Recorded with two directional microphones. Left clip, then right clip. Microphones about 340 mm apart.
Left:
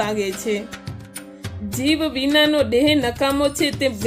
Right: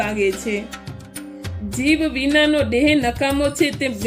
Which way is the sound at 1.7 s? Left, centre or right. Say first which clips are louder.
Right 2 dB; centre.